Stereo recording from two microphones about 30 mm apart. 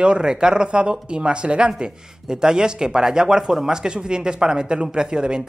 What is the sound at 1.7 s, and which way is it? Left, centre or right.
Speech, right.